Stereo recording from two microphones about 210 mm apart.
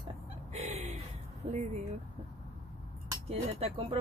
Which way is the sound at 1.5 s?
35° right (ahead or behind).